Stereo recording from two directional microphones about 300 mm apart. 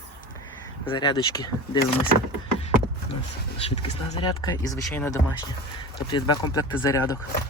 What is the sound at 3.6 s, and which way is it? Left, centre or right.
Speech, centre.